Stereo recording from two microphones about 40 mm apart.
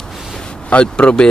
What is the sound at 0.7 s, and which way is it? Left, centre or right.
Speech, left.